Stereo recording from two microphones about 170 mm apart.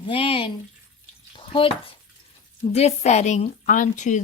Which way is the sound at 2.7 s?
40° left (ahead or behind).